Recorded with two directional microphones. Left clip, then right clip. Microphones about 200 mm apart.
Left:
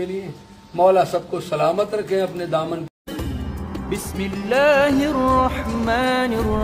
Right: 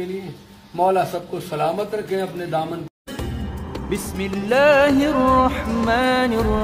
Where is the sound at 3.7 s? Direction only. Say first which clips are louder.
Right 1 dB; centre (ahead or behind).